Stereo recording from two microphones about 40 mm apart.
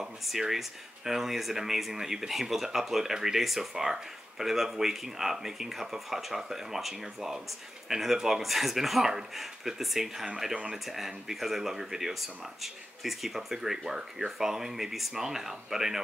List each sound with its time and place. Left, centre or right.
0.0 s speech: centre